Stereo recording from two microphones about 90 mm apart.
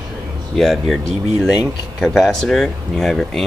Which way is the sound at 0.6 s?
5° left (ahead or behind).